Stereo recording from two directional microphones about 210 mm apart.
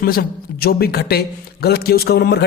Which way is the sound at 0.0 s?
45° left (ahead or behind).